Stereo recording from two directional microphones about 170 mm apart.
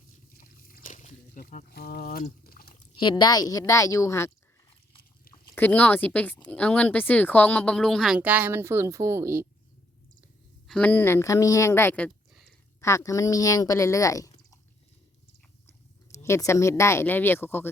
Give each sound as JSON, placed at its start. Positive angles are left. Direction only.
{"t": 0.3, "sound": "a sound", "side_deg": 55}
{"t": 2.9, "sound": "speech", "side_deg": 30}
{"t": 5.5, "sound": "speech", "side_deg": 10}
{"t": 10.7, "sound": "speech", "side_deg": 10}
{"t": 15.6, "sound": "speech", "side_deg": 15}